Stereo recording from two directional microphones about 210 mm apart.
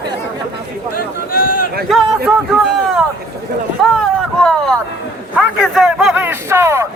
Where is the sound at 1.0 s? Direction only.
45° left (ahead or behind).